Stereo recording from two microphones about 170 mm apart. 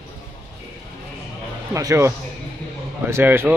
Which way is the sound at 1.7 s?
20° right (ahead or behind).